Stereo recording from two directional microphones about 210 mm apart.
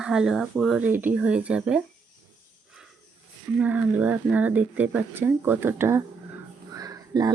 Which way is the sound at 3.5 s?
5° right (ahead or behind).